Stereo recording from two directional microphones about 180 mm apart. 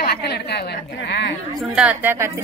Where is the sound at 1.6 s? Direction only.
5° right (ahead or behind).